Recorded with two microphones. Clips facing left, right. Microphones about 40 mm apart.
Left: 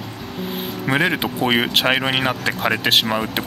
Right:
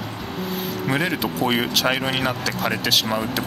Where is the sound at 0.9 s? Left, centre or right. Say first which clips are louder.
Left 4 dB; left.